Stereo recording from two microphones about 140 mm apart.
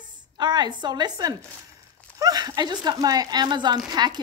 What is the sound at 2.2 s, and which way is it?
Speech, 25° right (ahead or behind).